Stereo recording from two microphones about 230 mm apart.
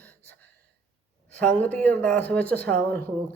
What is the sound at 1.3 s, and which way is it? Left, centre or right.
Speech, centre.